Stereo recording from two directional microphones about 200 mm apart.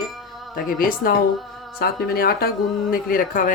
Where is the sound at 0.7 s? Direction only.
45° left (ahead or behind).